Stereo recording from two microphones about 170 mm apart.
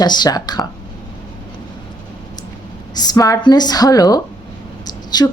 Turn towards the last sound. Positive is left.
turn(degrees=25)  # may be behind; listen again after turning